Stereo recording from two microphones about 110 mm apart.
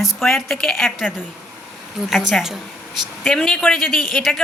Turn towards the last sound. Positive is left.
turn(degrees=0)  # may be behind; listen again after turning